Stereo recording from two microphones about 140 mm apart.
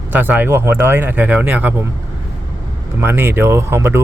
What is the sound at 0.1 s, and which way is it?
Speech, 15° right (ahead or behind).